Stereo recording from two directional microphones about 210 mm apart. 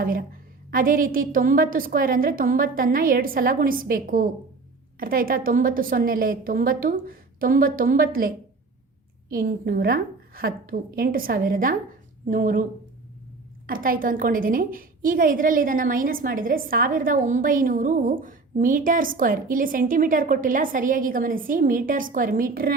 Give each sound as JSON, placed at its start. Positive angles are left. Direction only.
{"t": 0.0, "sound": "a woman's voice", "side_deg": -40}
{"t": 9.3, "sound": "a woman's voice", "side_deg": -45}
{"t": 13.7, "sound": "a woman's voice", "side_deg": -40}